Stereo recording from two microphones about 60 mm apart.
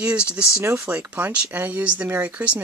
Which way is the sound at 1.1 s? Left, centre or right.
Right.